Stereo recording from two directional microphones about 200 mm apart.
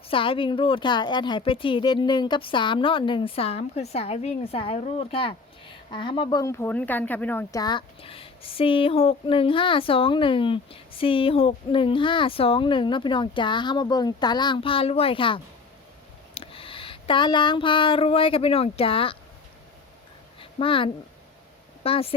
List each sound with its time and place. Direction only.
0.1 s speech: 25° left (ahead or behind)
16.3 s a sound: 30° left (ahead or behind)
20.4 s speech: 25° left (ahead or behind)